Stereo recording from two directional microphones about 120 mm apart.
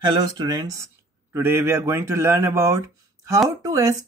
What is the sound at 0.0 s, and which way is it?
Speech, 40° right (ahead or behind).